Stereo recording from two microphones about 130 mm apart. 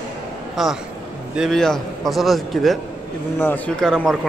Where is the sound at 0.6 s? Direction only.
Centre (ahead or behind).